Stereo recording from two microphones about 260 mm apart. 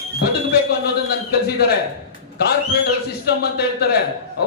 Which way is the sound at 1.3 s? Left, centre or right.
Left.